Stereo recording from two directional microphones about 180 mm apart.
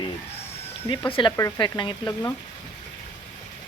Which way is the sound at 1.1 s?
30° left (ahead or behind).